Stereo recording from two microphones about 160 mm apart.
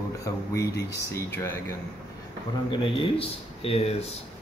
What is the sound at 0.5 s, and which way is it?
Speech, 20° left (ahead or behind).